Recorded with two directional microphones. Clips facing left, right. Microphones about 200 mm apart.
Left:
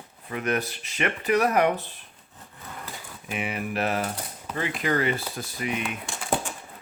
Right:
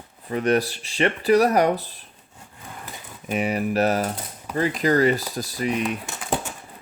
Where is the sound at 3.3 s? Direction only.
40° right (ahead or behind).